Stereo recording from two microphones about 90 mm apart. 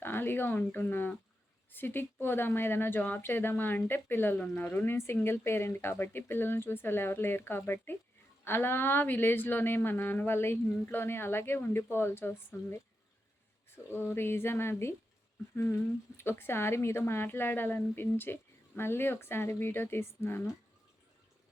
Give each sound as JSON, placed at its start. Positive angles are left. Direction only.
{"t": 0.0, "sound": "speech", "side_deg": 25}
{"t": 13.9, "sound": "speech", "side_deg": 25}
{"t": 16.1, "sound": "speech", "side_deg": 25}